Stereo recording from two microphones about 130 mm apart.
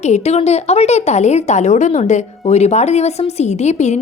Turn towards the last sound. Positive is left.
turn(degrees=60)  # may be behind; listen again after turning